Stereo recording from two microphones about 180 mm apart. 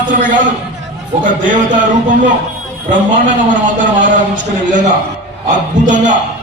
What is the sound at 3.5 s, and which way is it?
A man's voice, 45° right (ahead or behind).